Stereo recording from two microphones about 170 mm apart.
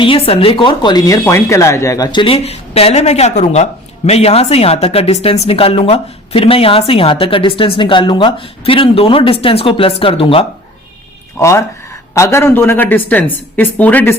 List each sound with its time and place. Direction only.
0.0 s speech: 30° left (ahead or behind)
11.3 s a woman's voice: 15° left (ahead or behind)